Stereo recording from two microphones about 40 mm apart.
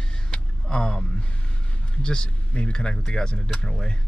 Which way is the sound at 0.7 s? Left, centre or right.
Left.